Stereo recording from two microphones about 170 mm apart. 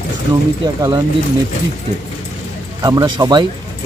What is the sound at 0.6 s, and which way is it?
Speech, 25° right (ahead or behind).